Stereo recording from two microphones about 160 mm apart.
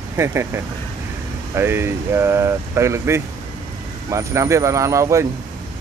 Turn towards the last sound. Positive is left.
turn(degrees=-20)  # may be behind; listen again after turning